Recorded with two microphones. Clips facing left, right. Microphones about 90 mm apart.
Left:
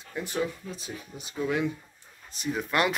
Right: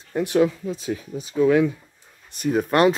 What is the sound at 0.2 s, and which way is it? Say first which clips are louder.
Speech: right 11 dB; 70° right (ahead or behind).